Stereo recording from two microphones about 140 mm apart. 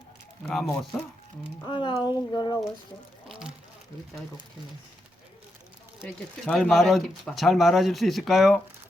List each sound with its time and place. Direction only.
0.4 s speech: centre (ahead or behind)
1.6 s speech: 35° left (ahead or behind)
3.2 s a sound: 5° right (ahead or behind)
6.1 s speech: 5° left (ahead or behind)